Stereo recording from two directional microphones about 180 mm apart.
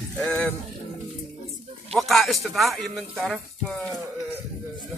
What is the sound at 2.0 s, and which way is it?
Speech, centre (ahead or behind).